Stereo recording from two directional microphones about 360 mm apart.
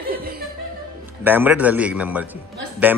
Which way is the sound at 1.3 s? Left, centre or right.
Centre.